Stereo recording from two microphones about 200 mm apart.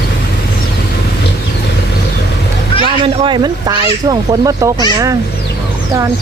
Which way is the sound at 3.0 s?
25° right (ahead or behind).